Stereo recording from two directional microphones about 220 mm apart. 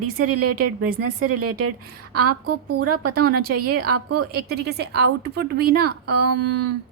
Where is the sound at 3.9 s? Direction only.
90° right.